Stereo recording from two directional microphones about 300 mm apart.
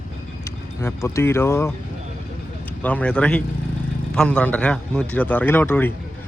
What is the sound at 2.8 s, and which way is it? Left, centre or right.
Speech, centre.